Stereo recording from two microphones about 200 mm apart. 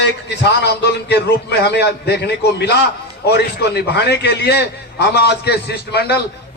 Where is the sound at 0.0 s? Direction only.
60° left (ahead or behind).